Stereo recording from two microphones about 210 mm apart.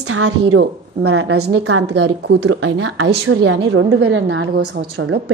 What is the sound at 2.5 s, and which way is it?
A woman's voice, 75° right (ahead or behind).